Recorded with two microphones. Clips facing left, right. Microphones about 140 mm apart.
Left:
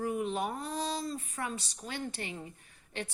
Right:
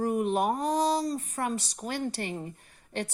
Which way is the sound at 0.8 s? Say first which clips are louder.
Right 8 dB; 40° right (ahead or behind).